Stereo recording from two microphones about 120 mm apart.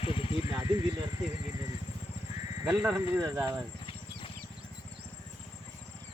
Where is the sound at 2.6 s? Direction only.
10° right (ahead or behind).